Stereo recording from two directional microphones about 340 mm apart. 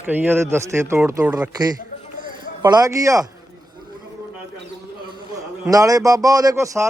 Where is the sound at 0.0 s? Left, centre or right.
Centre.